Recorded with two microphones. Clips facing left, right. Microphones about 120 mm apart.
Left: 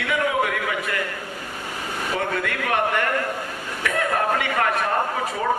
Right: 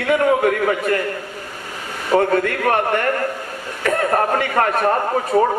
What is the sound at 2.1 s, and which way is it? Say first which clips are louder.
A man's voice: right 11 dB; 40° right (ahead or behind).